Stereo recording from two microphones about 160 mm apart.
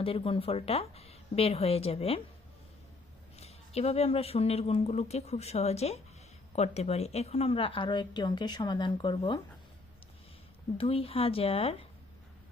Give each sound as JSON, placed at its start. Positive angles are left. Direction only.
{"t": 0.0, "sound": "a woman's voice", "side_deg": 35}
{"t": 3.3, "sound": "a woman's voice", "side_deg": 40}
{"t": 10.8, "sound": "a woman's voice", "side_deg": 35}